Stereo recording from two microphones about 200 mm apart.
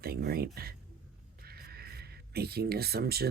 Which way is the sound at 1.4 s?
50° right (ahead or behind).